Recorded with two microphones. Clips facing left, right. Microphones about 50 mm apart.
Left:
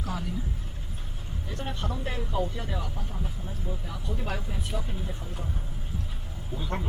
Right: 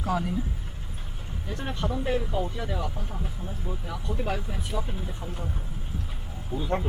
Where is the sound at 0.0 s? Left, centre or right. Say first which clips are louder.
Right 6 dB; right.